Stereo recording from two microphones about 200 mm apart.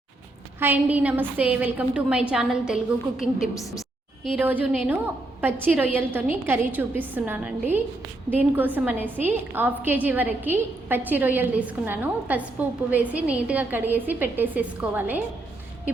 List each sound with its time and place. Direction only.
0.6 s a woman's voice: 10° right (ahead or behind)
3.5 s a woman's voice: 15° left (ahead or behind)
4.2 s a woman's voice: centre (ahead or behind)